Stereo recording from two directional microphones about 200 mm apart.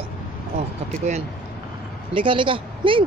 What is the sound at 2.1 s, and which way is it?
Speech, 25° right (ahead or behind).